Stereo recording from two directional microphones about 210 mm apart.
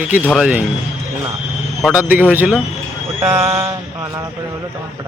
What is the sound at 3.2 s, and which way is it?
Speech, 25° right (ahead or behind).